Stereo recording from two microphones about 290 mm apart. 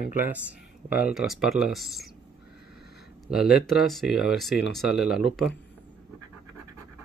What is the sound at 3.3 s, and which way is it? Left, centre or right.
Speech, centre.